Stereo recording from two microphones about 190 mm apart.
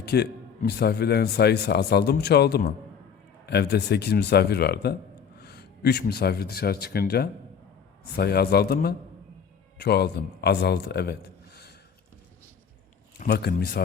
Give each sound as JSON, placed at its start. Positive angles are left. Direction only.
{"t": 0.0, "sound": "a man's voice", "side_deg": 60}
{"t": 13.1, "sound": "a man's voice", "side_deg": 60}